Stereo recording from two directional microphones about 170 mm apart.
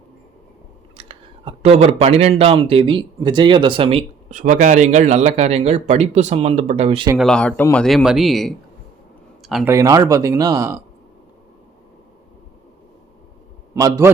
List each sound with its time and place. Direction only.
0.9 s speech: 35° right (ahead or behind)
7.2 s speech: 5° left (ahead or behind)
9.4 s a sound: centre (ahead or behind)
9.6 s speech: 20° right (ahead or behind)
13.7 s speech: 20° right (ahead or behind)